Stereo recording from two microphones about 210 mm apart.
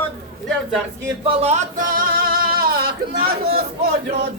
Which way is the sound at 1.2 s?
30° right (ahead or behind).